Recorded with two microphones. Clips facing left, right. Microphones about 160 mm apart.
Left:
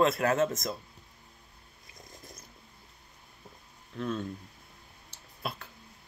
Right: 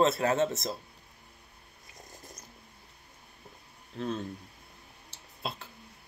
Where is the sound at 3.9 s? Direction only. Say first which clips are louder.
Even; 40° right (ahead or behind).